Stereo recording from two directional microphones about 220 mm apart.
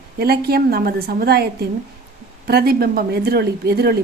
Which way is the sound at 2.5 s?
45° right (ahead or behind).